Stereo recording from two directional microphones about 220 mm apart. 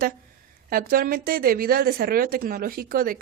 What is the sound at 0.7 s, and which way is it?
A woman's voice, 40° right (ahead or behind).